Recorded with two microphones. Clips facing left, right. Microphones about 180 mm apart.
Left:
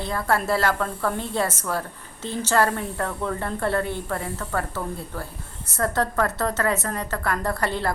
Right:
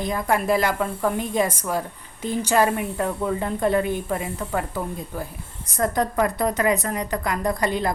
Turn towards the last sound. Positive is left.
turn(degrees=-15)  # may be behind; listen again after turning